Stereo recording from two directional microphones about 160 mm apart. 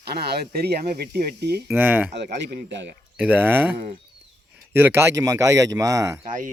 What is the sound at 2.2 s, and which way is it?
Speech, 90° right.